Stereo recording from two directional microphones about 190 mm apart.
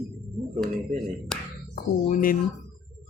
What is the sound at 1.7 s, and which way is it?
Speech, 45° left (ahead or behind).